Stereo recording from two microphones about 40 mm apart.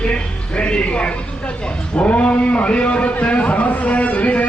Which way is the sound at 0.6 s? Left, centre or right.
Left.